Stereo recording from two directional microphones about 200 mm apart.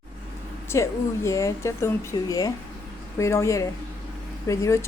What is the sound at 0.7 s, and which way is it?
Speech, 15° left (ahead or behind).